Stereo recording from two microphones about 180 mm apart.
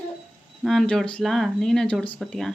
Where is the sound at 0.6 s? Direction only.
Centre (ahead or behind).